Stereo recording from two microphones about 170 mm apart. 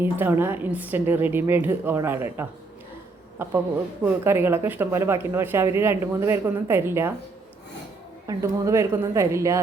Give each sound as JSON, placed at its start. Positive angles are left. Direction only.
{"t": 0.0, "sound": "speech", "side_deg": -10}
{"t": 8.3, "sound": "speech", "side_deg": -15}